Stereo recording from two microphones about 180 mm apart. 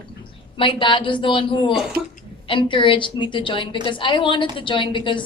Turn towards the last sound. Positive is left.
turn(degrees=25)  # may be behind; listen again after turning